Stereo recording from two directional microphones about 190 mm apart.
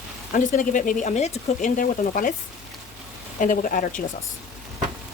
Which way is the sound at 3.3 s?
45° left (ahead or behind).